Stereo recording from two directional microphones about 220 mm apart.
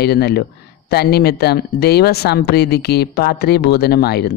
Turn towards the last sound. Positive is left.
turn(degrees=45)  # may be behind; listen again after turning